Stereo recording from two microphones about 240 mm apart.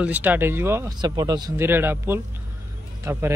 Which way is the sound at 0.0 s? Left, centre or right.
Centre.